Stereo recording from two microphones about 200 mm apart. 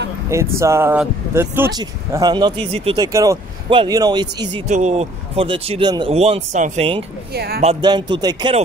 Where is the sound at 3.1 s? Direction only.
15° right (ahead or behind).